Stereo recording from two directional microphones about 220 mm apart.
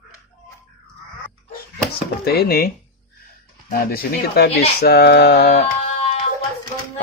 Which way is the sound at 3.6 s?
40° left (ahead or behind).